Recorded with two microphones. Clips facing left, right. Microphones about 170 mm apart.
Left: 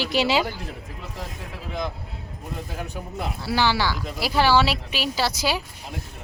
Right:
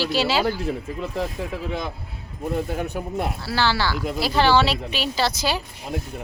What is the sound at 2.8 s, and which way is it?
Speech, 55° right (ahead or behind).